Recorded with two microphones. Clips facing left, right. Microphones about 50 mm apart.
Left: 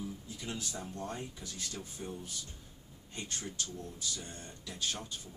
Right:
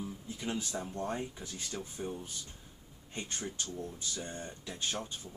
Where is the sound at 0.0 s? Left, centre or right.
Right.